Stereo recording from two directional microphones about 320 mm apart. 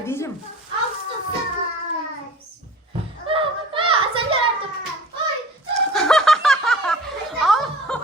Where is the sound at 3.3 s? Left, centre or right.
Centre.